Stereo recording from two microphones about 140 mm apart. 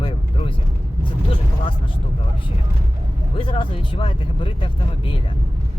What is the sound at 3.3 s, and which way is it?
Speech, 40° left (ahead or behind).